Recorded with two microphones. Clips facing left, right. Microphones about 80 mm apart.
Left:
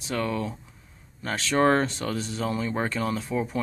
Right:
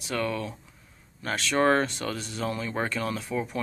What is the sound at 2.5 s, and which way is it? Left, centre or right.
Speech, centre.